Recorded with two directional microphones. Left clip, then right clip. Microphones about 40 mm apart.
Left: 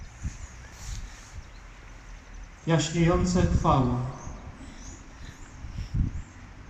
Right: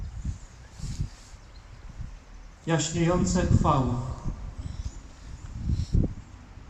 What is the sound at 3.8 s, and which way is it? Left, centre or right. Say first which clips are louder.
Speech: left 2 dB; right.